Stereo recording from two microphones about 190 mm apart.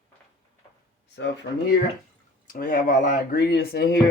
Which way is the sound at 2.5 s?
45° left (ahead or behind).